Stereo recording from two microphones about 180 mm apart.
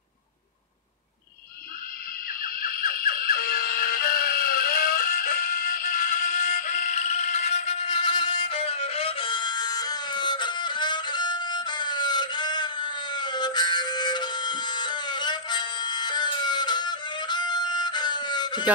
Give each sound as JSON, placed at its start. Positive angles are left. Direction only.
{"t": 2.4, "sound": "music", "side_deg": 55}
{"t": 7.8, "sound": "music", "side_deg": 25}